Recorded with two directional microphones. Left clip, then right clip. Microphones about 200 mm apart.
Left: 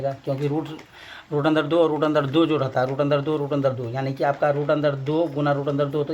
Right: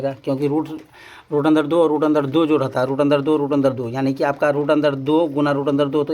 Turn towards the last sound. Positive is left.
turn(degrees=-35)  # may be behind; listen again after turning